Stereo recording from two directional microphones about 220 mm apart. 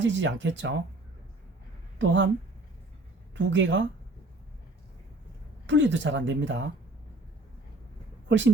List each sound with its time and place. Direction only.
0.0 s speech: 55° right (ahead or behind)
2.0 s speech: 55° right (ahead or behind)
3.3 s speech: 55° right (ahead or behind)
5.6 s speech: 55° right (ahead or behind)